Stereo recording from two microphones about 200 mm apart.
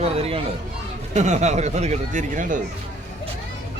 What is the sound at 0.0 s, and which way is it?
Speech, 30° right (ahead or behind).